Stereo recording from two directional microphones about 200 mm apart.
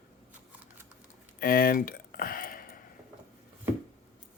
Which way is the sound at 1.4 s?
45° left (ahead or behind).